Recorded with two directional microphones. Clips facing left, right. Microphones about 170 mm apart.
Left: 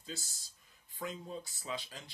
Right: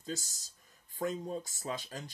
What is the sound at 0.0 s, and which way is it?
Speech, 45° right (ahead or behind).